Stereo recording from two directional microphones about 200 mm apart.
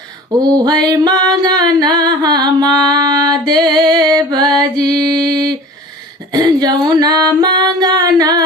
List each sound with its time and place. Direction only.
0.3 s music: 20° right (ahead or behind)
4.9 s mantra: 5° left (ahead or behind)
6.3 s music: 20° right (ahead or behind)